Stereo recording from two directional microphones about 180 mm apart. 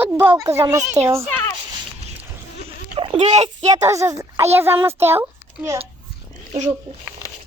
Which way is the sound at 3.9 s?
15° right (ahead or behind).